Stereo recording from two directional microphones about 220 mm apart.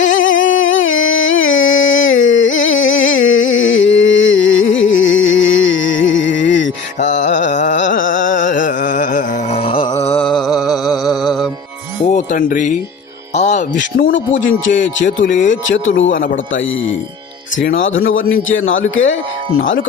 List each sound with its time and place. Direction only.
0.0 s a sound: 35° left (ahead or behind)
0.3 s music: 60° left (ahead or behind)
2.6 s a sound: 60° left (ahead or behind)
7.0 s carnatic music: 35° left (ahead or behind)
10.1 s mantra: 5° left (ahead or behind)
11.0 s music: centre (ahead or behind)
12.1 s speech: 35° left (ahead or behind)
14.1 s speech: 60° left (ahead or behind)
15.2 s speech: 35° left (ahead or behind)
15.4 s speech: 60° left (ahead or behind)
17.7 s speech: 60° left (ahead or behind)